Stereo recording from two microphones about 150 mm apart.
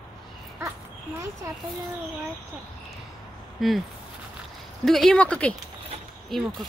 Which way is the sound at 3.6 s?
Centre (ahead or behind).